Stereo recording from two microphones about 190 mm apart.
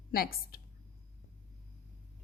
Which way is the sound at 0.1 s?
50° left (ahead or behind).